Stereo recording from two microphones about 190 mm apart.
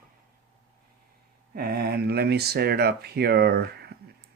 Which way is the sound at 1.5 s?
55° right (ahead or behind).